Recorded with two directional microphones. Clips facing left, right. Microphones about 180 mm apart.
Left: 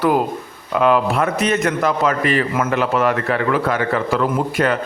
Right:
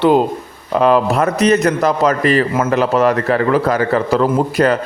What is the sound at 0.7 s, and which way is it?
A man's voice, 35° right (ahead or behind).